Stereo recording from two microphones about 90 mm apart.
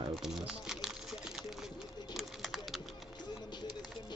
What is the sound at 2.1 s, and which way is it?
Bird, centre (ahead or behind).